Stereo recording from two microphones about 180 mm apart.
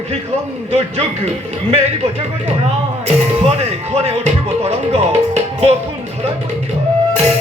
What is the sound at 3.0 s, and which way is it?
Speech, 35° right (ahead or behind).